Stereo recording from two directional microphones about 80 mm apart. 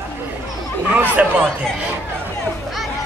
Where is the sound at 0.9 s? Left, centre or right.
Right.